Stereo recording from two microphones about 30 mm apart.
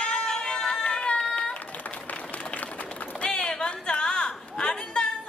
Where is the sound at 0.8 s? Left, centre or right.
Left.